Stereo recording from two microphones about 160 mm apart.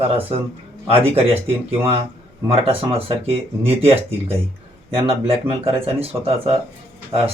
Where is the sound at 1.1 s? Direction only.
35° right (ahead or behind).